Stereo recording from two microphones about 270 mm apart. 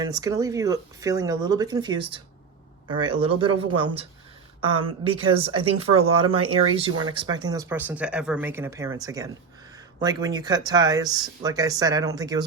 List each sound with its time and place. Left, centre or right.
0.0 s speech: centre
4.8 s speech: centre